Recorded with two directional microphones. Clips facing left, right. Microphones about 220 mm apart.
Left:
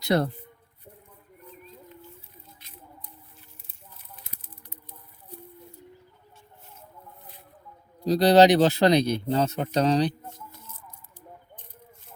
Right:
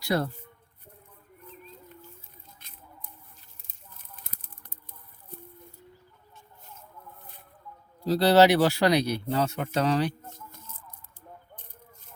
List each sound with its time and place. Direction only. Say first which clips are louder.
0.0 s speech: left 4 dB; 20° left (ahead or behind)
2.6 s a sound: left 3 dB; 50° right (ahead or behind)
8.0 s speech: left 2 dB; 15° left (ahead or behind)